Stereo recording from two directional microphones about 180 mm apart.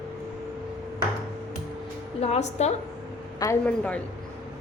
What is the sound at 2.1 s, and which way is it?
Speech, 35° left (ahead or behind).